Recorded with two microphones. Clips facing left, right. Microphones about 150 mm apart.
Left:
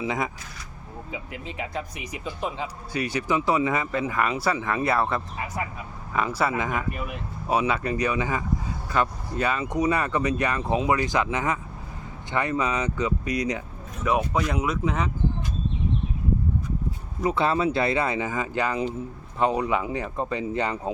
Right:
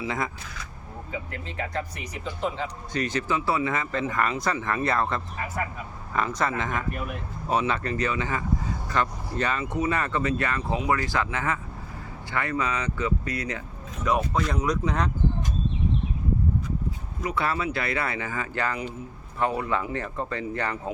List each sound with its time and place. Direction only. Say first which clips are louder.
0.0 s speech: left 2 dB; 15° left (ahead or behind)
1.3 s speech: left 1 dB; 15° left (ahead or behind)
17.2 s speech: left 5 dB; 25° left (ahead or behind)